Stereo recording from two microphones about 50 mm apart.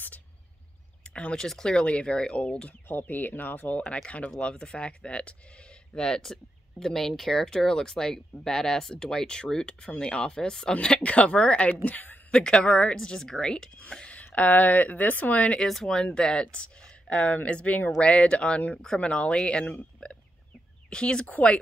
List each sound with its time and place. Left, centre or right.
1.1 s speech: left
2.9 s speech: left
4.4 s speech: centre
12.3 s speech: centre
15.6 s speech: centre
20.0 s burping: centre
20.9 s speech: centre